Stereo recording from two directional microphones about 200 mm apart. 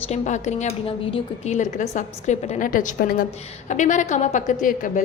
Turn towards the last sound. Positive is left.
turn(degrees=40)  # may be behind; listen again after turning